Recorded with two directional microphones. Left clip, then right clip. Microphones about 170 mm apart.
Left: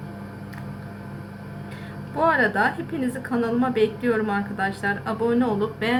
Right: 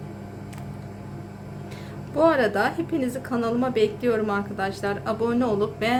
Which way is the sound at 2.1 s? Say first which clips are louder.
Even; 35° right (ahead or behind).